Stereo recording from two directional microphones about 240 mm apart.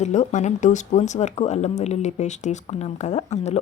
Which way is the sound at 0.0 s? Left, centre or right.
Left.